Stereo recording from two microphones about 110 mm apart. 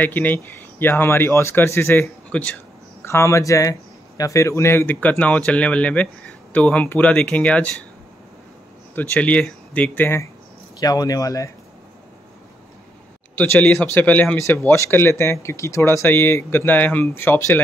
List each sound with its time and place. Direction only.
0.0 s speech: 15° left (ahead or behind)
2.3 s speech: 10° left (ahead or behind)
3.0 s speech: 25° left (ahead or behind)
8.9 s speech: 15° left (ahead or behind)
10.8 s speech: 35° left (ahead or behind)
13.4 s speech: 15° left (ahead or behind)